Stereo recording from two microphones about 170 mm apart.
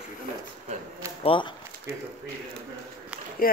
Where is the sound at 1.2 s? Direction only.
30° left (ahead or behind).